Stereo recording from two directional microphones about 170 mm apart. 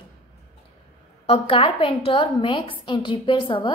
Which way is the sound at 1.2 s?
35° left (ahead or behind).